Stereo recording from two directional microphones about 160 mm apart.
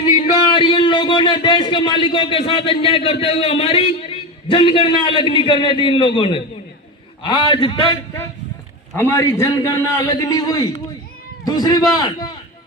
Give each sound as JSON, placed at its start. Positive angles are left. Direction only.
{"t": 0.0, "sound": "a man's voice", "side_deg": 35}
{"t": 9.0, "sound": "a man's voice", "side_deg": 15}